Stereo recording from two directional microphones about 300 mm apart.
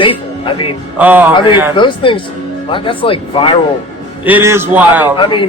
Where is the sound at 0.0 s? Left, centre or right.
Centre.